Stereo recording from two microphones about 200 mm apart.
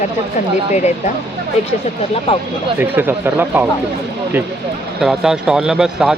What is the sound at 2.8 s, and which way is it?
Speech, 10° right (ahead or behind).